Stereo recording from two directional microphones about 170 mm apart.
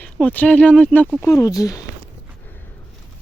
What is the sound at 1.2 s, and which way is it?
Speech, 20° left (ahead or behind).